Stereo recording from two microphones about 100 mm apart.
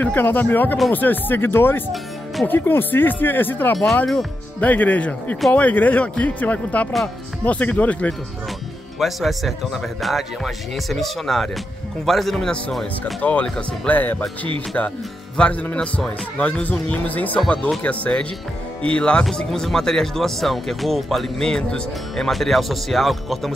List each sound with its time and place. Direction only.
0.0 s speech: 20° left (ahead or behind)
9.0 s speech: centre (ahead or behind); by 14.2 s 15° left (ahead or behind)
15.3 s speech: 10° left (ahead or behind)